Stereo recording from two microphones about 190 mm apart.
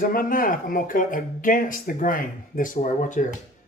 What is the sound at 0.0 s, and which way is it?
Speech, 45° left (ahead or behind).